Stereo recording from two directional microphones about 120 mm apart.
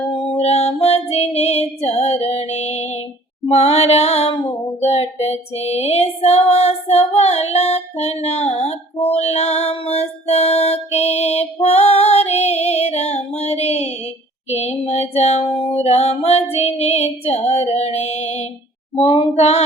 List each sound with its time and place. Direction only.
0.1 s music: 50° left (ahead or behind)
14.5 s female singing: 65° left (ahead or behind)
19.4 s female singing: 65° left (ahead or behind)